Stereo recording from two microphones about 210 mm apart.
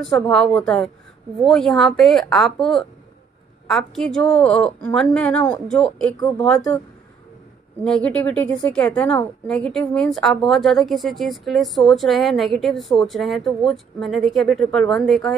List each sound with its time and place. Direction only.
0.3 s a woman's voice: 5° left (ahead or behind)
6.1 s speech: 20° left (ahead or behind)
6.4 s a woman's voice: 5° left (ahead or behind)
7.8 s a woman's voice: 5° left (ahead or behind)